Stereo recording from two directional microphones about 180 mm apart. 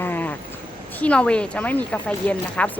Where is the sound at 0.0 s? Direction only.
10° left (ahead or behind).